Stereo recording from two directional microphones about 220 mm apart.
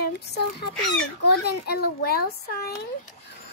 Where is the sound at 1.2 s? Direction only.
45° left (ahead or behind).